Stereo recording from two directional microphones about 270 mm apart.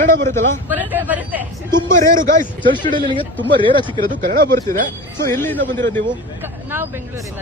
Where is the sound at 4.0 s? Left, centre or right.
Right.